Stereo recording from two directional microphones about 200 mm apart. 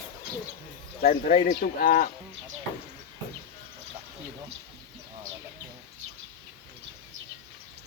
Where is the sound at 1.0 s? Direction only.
45° left (ahead or behind).